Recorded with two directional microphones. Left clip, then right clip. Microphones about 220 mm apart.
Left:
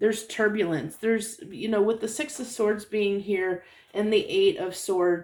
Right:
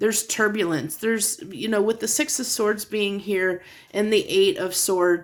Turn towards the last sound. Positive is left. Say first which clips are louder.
# right 4 dB
turn(degrees=-45)  # may be behind; listen again after turning